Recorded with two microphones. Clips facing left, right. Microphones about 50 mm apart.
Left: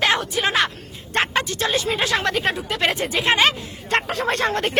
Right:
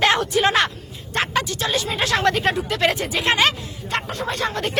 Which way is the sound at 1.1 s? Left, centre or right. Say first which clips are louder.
Left 1 dB; left.